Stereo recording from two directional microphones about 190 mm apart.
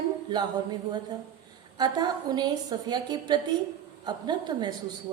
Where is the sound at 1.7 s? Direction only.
20° right (ahead or behind).